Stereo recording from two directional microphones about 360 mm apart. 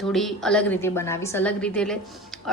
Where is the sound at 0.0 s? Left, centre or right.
Centre.